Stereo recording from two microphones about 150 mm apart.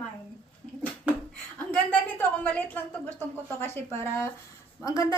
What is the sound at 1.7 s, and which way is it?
A woman's voice, 10° left (ahead or behind).